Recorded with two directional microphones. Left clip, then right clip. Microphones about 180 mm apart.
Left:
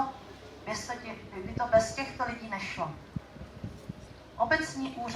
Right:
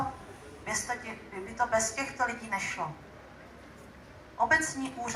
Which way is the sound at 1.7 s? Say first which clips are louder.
Left 8 dB; 30° right (ahead or behind).